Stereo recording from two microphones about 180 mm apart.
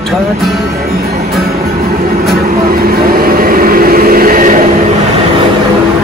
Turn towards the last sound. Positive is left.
turn(degrees=-45)  # may be behind; listen again after turning